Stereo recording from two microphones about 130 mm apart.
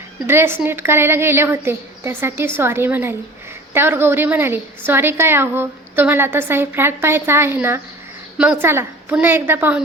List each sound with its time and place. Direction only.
0.3 s a woman's voice: 20° right (ahead or behind)